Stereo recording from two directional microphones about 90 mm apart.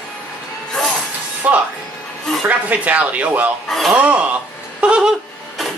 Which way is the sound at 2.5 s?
15° right (ahead or behind).